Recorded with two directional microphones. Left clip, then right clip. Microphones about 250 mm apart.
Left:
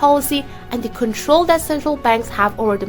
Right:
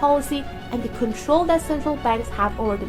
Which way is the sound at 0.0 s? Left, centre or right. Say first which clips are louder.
Left 5 dB; left.